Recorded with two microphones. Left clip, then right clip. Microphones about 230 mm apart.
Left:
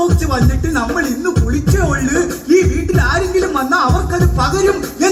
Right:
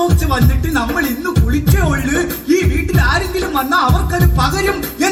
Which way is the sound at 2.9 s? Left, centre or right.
Right.